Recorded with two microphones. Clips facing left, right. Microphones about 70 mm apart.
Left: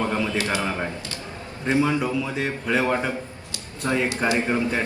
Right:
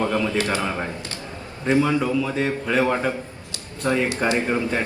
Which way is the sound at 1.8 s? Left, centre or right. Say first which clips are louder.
Right 2 dB; centre.